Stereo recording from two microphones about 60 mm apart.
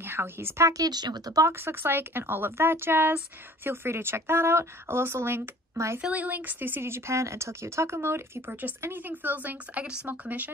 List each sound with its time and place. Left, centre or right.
0.0 s speech: right
0.7 s speech: right
1.5 s speech: right
5.9 s speech: right
8.5 s speech: right